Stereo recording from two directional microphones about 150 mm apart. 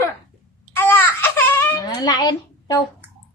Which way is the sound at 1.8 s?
25° left (ahead or behind).